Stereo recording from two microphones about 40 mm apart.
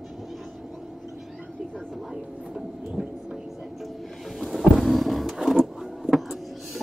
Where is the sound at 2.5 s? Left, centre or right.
Centre.